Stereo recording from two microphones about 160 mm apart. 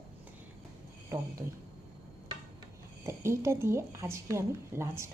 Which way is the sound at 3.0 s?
15° right (ahead or behind).